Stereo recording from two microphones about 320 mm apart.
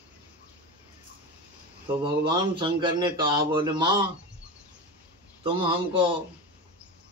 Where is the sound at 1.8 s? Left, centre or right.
Centre.